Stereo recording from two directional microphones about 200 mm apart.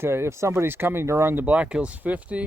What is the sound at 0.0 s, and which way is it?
Speech, 10° right (ahead or behind).